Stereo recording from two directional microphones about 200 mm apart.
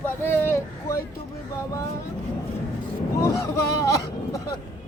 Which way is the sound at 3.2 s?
15° left (ahead or behind).